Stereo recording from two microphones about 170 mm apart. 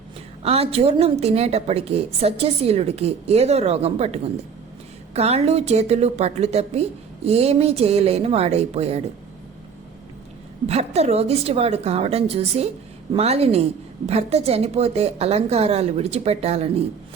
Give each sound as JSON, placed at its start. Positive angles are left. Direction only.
{"t": 0.4, "sound": "a woman's voice", "side_deg": -35}
{"t": 10.7, "sound": "a woman's voice", "side_deg": -40}